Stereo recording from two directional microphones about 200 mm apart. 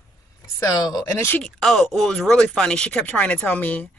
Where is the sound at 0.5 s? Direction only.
15° left (ahead or behind).